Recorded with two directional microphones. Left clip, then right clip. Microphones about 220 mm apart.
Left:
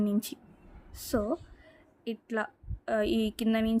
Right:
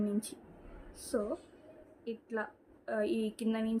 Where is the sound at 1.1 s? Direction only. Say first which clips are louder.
Left 4 dB; 55° left (ahead or behind).